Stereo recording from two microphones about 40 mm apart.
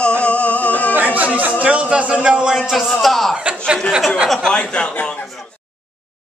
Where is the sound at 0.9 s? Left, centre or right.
Right.